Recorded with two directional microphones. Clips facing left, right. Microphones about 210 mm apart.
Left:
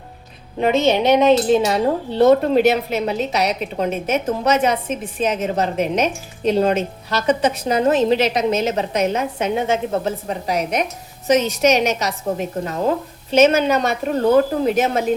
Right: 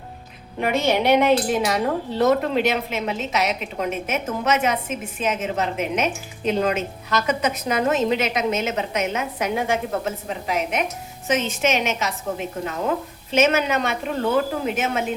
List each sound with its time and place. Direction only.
0.6 s speech: 20° left (ahead or behind)
10.0 s speech: 35° left (ahead or behind)